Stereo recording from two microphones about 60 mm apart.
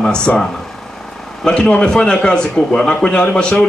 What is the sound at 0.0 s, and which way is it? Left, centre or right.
Speech, centre.